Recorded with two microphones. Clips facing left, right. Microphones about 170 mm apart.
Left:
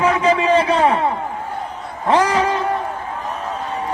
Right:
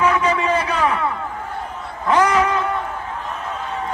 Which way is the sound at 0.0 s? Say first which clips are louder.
Left 2 dB; 35° left (ahead or behind).